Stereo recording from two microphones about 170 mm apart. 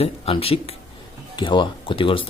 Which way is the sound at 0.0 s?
35° left (ahead or behind).